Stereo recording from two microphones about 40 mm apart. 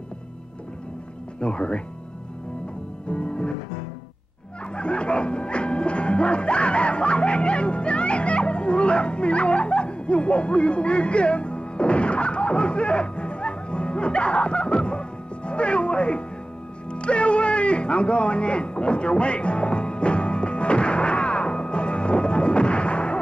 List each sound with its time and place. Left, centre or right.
1.4 s speech: left
3.1 s music: left
4.7 s music: left